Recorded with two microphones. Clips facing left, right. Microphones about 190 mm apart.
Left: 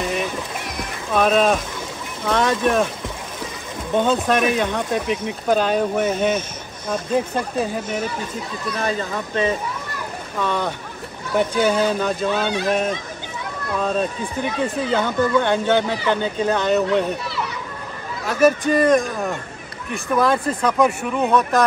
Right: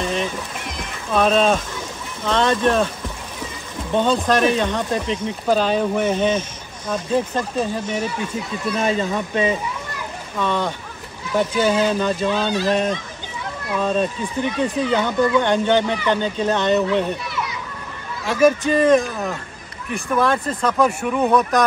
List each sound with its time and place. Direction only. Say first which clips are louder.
0.0 s music: right 1 dB; 10° left (ahead or behind)
1.1 s speech: even; 5° left (ahead or behind)
3.9 s speech: even; 10° left (ahead or behind)
8.7 s speech: right 3 dB; 20° right (ahead or behind)
10.4 s speech: right 1 dB; 10° left (ahead or behind)
12.0 s speech: right 1 dB; 5° left (ahead or behind)
15.0 s speech: even; 15° right (ahead or behind)
15.4 s speech: right 1 dB; 10° left (ahead or behind)
18.6 s speech: right 1 dB; 5° right (ahead or behind)